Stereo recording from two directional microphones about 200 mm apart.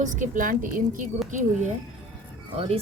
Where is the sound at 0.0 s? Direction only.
40° right (ahead or behind).